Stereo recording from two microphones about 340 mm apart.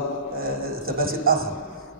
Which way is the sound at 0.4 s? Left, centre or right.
Right.